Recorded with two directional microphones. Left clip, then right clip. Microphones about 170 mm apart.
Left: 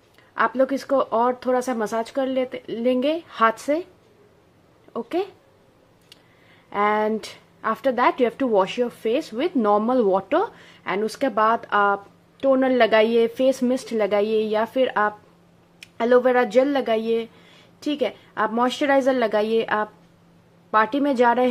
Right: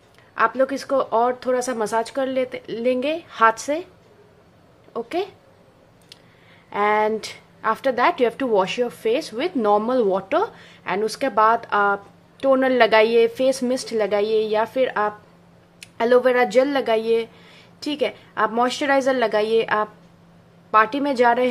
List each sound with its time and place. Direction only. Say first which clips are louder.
0.3 s speech: right 1 dB; 30° left (ahead or behind)
4.9 s speech: even; 25° left (ahead or behind)
6.7 s speech: right 2 dB; 25° left (ahead or behind)